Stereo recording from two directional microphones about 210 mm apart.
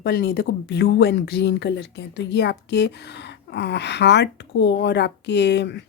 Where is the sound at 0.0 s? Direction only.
50° left (ahead or behind).